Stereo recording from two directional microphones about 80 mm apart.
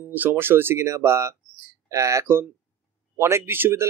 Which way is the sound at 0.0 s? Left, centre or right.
Right.